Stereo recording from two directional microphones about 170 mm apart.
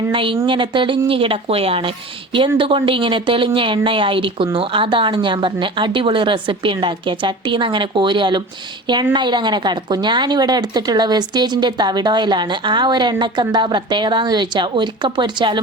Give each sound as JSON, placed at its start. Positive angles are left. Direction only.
{"t": 0.1, "sound": "a woman's voice", "side_deg": -30}